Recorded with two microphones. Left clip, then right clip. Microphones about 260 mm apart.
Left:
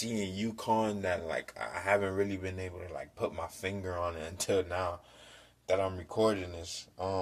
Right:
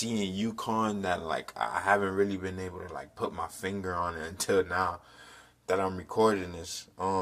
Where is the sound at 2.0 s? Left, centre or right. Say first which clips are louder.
Right 4 dB; centre.